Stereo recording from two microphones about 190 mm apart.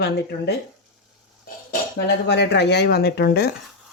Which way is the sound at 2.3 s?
60° left (ahead or behind).